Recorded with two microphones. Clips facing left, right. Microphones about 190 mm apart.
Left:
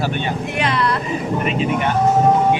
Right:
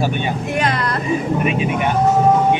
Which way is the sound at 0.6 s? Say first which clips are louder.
Left 3 dB; 45° right (ahead or behind).